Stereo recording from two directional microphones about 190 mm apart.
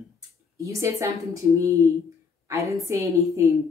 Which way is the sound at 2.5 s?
15° right (ahead or behind).